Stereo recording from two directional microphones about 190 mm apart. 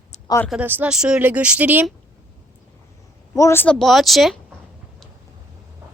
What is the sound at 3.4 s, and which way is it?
Speech, 15° left (ahead or behind).